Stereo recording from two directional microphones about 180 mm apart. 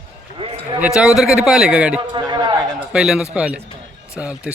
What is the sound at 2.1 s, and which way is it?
Speech, 25° right (ahead or behind).